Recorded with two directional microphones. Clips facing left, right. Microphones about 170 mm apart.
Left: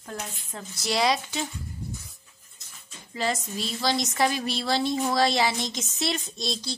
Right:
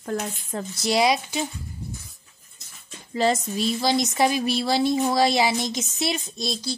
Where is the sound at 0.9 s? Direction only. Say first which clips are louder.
Right 4 dB; 15° right (ahead or behind).